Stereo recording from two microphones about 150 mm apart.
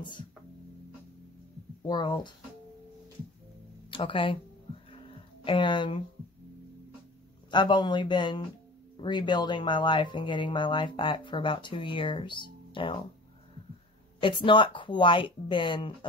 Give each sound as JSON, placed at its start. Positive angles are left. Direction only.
{"t": 1.9, "sound": "speech", "side_deg": 30}
{"t": 3.9, "sound": "speech", "side_deg": 35}
{"t": 4.9, "sound": "music", "side_deg": 35}
{"t": 7.5, "sound": "speech", "side_deg": 30}
{"t": 14.2, "sound": "speech", "side_deg": 35}